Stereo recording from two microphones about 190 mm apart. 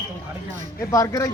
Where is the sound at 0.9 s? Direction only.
15° left (ahead or behind).